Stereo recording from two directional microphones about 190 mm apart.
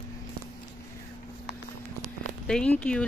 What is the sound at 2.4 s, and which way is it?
Speech, 5° left (ahead or behind).